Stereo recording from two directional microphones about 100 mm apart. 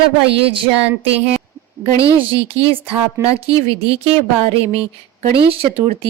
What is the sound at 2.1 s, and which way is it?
Speech, 60° right (ahead or behind).